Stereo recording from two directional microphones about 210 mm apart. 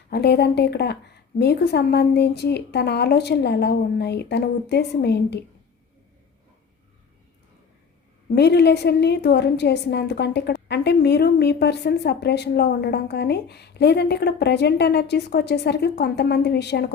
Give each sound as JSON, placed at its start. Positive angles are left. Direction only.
{"t": 0.1, "sound": "a woman's voice", "side_deg": 50}
{"t": 8.4, "sound": "a woman's voice", "side_deg": 50}